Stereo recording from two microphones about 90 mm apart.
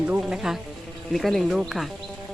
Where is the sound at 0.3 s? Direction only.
5° right (ahead or behind).